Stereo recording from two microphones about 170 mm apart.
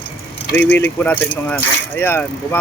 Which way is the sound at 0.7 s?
10° left (ahead or behind).